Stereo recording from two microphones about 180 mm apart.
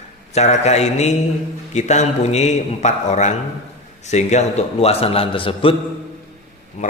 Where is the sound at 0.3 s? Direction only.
35° left (ahead or behind).